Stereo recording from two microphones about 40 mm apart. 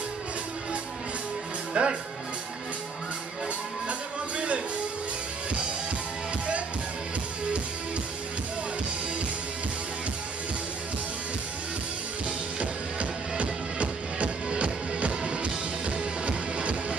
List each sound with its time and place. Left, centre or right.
1.7 s speech: right
12.5 s music: right